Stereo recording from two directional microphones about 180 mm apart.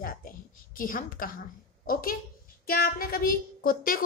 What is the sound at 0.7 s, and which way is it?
A woman's voice, 50° left (ahead or behind).